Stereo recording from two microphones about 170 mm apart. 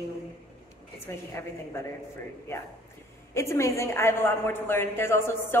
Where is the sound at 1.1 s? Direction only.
15° left (ahead or behind).